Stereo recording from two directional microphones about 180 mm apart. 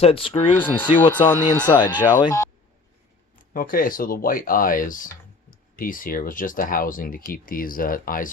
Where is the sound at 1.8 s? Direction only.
25° left (ahead or behind).